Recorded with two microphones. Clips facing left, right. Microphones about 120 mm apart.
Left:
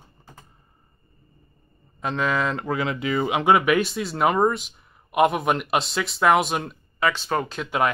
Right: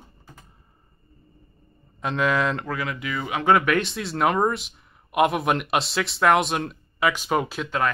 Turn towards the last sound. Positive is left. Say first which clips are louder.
# right 1 dB
turn(degrees=-5)  # may be behind; listen again after turning